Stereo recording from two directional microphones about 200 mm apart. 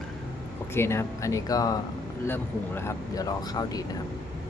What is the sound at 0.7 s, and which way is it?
Speech, 10° left (ahead or behind).